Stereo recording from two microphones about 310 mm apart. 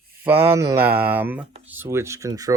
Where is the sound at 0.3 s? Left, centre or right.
Centre.